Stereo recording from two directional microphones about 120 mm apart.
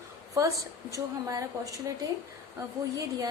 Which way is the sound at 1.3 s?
30° right (ahead or behind).